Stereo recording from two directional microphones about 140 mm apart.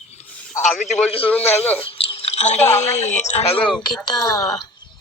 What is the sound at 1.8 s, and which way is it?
A woman's voice, 40° left (ahead or behind).